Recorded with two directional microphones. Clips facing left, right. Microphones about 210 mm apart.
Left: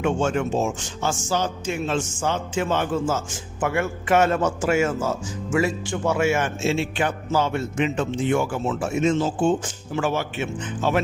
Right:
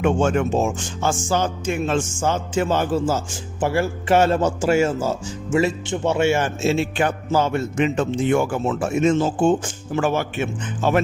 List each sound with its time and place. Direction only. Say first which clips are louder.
0.0 s a man's voice: right 3 dB; 50° right (ahead or behind)